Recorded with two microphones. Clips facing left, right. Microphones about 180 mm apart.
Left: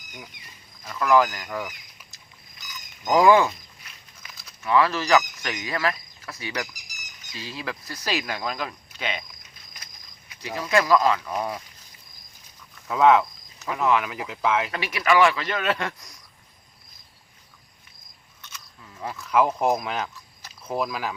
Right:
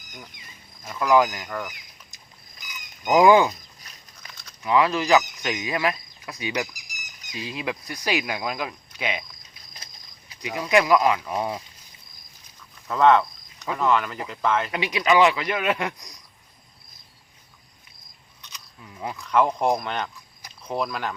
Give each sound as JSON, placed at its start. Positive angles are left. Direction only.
{"t": 0.9, "sound": "speech", "side_deg": -15}
{"t": 1.5, "sound": "speech", "side_deg": 5}
{"t": 2.6, "sound": "frog", "side_deg": -15}
{"t": 3.5, "sound": "a sound", "side_deg": -40}
{"t": 4.3, "sound": "a sound", "side_deg": 5}
{"t": 4.6, "sound": "speech", "side_deg": -15}
{"t": 9.7, "sound": "a sound", "side_deg": -30}
{"t": 10.4, "sound": "speech", "side_deg": -15}
{"t": 12.9, "sound": "speech", "side_deg": 5}
{"t": 14.7, "sound": "speech", "side_deg": -20}
{"t": 18.4, "sound": "a sound", "side_deg": -15}
{"t": 19.2, "sound": "speech", "side_deg": 5}